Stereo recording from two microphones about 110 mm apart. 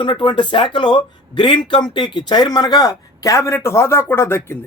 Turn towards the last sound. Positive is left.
turn(degrees=20)  # may be behind; listen again after turning